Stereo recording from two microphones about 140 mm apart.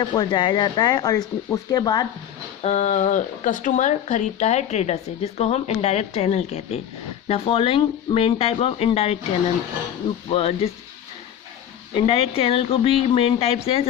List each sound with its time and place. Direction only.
0.0 s speech: 30° left (ahead or behind)
2.6 s speech: 55° left (ahead or behind)
10.2 s speech: 40° left (ahead or behind)
11.9 s speech: 45° left (ahead or behind)